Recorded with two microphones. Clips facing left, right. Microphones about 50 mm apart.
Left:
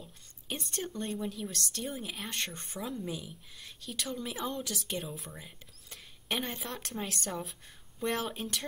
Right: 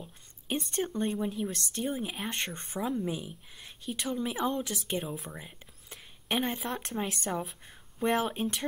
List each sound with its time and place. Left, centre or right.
0.7 s a woman's voice: right
1.1 s speech: centre
1.4 s a woman's voice: right
4.6 s speech: right
5.3 s a sound: centre
6.6 s speech: centre